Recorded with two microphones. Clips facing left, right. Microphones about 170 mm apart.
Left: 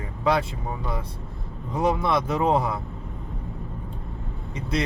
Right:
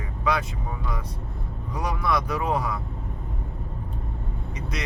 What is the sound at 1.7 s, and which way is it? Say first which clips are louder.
Speech: left 4 dB; 25° left (ahead or behind).